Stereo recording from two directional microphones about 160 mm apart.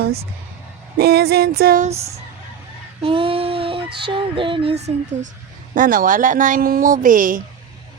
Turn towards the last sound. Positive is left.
turn(degrees=-55)  # may be behind; listen again after turning